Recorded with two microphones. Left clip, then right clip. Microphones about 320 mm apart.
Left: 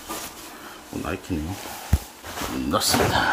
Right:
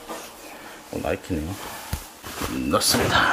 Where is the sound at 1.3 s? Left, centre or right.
Centre.